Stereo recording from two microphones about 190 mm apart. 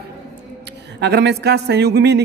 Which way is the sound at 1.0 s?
60° right (ahead or behind).